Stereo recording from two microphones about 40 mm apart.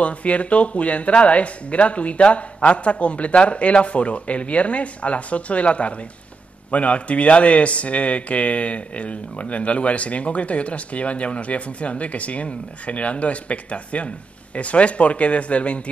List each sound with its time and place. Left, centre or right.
0.0 s speech: left